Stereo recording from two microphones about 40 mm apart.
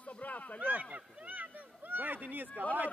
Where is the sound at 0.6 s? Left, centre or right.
Right.